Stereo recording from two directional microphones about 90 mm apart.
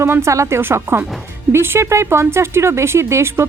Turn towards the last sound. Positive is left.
turn(degrees=-30)  # may be behind; listen again after turning